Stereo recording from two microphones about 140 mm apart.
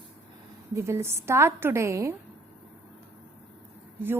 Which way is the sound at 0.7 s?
20° right (ahead or behind).